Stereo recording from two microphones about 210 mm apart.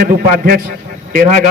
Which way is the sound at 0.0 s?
45° right (ahead or behind).